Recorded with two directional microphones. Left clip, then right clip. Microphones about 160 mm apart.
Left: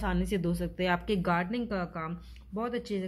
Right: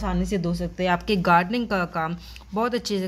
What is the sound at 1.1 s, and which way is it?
Speech, 20° right (ahead or behind).